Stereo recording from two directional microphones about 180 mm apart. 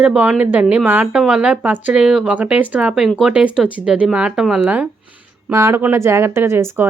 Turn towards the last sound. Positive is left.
turn(degrees=-15)  # may be behind; listen again after turning